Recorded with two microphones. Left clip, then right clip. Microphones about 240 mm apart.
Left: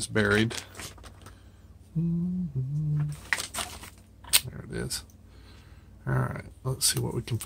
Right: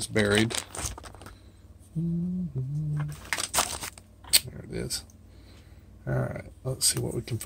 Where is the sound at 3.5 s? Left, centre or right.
Right.